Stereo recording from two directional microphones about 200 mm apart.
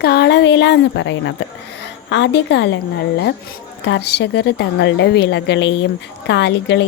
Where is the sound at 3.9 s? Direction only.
55° left (ahead or behind).